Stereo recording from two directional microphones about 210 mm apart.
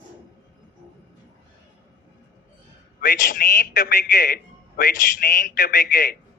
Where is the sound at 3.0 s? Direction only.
40° left (ahead or behind).